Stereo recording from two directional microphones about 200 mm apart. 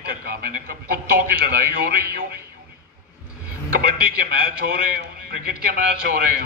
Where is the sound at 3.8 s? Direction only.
50° right (ahead or behind).